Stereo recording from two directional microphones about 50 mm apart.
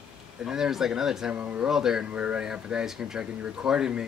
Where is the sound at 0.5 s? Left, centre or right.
Centre.